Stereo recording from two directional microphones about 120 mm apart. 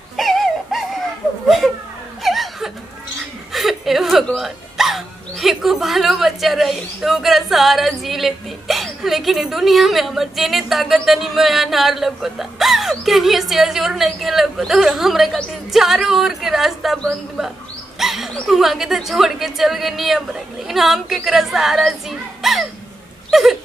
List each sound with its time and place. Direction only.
0.1 s a sound: centre (ahead or behind)
2.2 s laughter: centre (ahead or behind)
3.5 s speech: centre (ahead or behind)
23.3 s dog: centre (ahead or behind)